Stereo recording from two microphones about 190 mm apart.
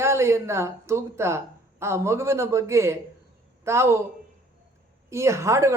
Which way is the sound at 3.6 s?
15° right (ahead or behind).